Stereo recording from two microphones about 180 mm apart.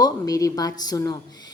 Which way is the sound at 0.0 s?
20° left (ahead or behind).